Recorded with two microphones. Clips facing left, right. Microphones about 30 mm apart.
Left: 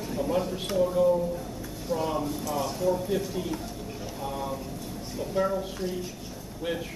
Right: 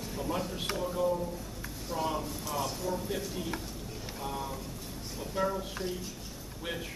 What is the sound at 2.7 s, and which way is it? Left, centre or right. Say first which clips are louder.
Speech: left 8 dB; centre.